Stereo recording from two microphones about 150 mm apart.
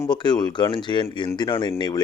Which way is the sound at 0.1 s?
30° left (ahead or behind).